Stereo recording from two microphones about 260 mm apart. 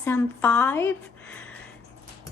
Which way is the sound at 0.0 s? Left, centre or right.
Centre.